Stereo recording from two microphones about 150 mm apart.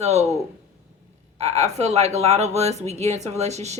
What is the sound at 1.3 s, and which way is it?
Speech, 45° right (ahead or behind).